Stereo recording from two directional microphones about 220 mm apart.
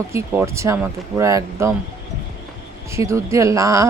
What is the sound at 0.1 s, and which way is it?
Speech, 10° right (ahead or behind).